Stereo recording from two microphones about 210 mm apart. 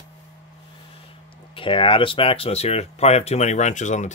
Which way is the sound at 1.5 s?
25° left (ahead or behind).